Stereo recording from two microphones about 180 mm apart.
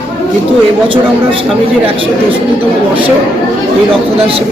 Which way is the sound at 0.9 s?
30° right (ahead or behind).